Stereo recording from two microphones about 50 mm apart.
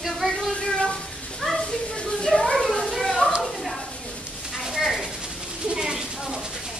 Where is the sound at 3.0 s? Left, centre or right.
Centre.